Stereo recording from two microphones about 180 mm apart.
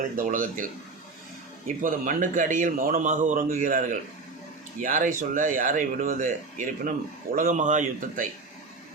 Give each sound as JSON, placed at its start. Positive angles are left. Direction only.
{"t": 0.2, "sound": "a man's voice", "side_deg": -50}